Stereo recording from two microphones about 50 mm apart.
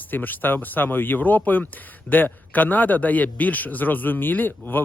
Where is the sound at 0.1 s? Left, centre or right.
Left.